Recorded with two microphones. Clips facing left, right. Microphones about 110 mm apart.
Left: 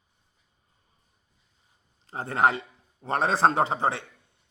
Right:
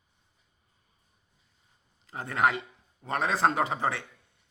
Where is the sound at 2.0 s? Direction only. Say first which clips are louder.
Left 3 dB; 30° left (ahead or behind).